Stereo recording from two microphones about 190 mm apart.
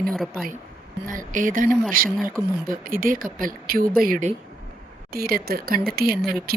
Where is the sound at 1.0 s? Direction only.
45° right (ahead or behind).